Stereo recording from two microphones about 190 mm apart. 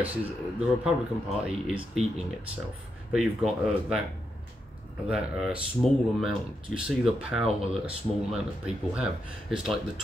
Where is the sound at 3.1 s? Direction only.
Centre (ahead or behind).